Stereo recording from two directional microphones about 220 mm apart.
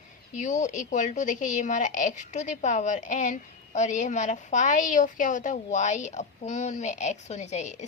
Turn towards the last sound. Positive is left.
turn(degrees=30)  # may be behind; listen again after turning